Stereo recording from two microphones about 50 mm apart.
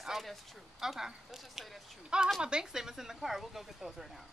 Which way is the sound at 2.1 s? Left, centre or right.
Centre.